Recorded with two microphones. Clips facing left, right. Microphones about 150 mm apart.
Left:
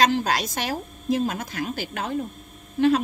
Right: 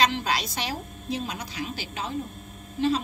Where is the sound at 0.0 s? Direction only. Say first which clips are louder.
Left 4 dB; 45° left (ahead or behind).